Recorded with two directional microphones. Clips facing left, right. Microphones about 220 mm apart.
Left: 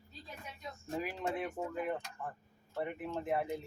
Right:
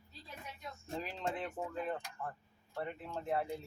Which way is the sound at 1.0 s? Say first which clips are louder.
Left 3 dB; 10° left (ahead or behind).